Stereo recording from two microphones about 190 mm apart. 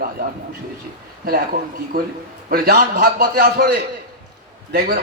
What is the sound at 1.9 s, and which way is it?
A man's voice, 50° right (ahead or behind).